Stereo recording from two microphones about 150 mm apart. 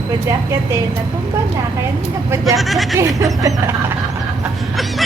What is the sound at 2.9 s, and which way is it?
Speech, 20° right (ahead or behind).